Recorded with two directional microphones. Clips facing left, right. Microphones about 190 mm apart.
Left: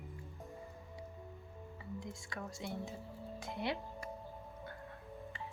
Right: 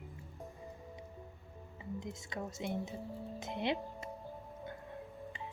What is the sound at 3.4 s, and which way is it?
Music, 20° right (ahead or behind).